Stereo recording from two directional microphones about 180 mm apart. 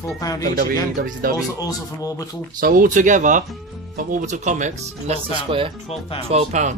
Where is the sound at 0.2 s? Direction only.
20° left (ahead or behind).